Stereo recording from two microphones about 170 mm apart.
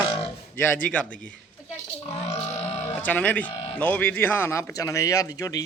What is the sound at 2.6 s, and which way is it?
Sheep, 40° left (ahead or behind).